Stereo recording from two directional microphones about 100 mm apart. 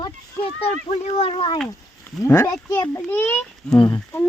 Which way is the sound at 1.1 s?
65° left (ahead or behind).